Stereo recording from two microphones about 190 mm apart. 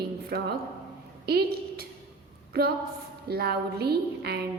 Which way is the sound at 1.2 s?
55° right (ahead or behind).